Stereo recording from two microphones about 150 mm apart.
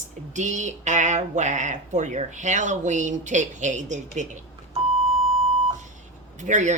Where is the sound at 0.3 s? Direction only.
55° right (ahead or behind).